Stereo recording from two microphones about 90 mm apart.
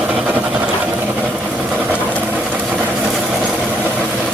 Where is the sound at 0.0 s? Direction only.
15° right (ahead or behind).